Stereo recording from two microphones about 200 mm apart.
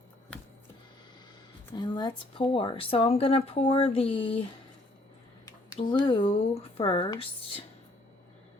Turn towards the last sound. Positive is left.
turn(degrees=25)  # may be behind; listen again after turning